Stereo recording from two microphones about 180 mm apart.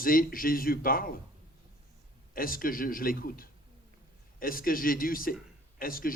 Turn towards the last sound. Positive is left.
turn(degrees=55)  # may be behind; listen again after turning